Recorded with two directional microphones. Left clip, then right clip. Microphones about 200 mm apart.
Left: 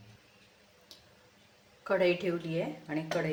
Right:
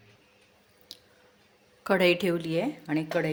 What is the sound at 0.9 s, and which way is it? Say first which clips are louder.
Squish: right 8 dB; 45° right (ahead or behind).